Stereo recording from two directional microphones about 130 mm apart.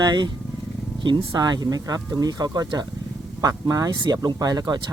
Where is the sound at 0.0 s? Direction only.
35° right (ahead or behind).